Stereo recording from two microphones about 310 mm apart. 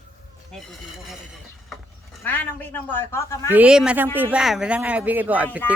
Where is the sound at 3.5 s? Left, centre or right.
Centre.